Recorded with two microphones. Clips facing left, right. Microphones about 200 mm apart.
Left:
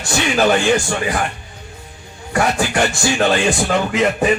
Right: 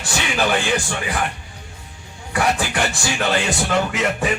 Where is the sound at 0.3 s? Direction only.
40° left (ahead or behind).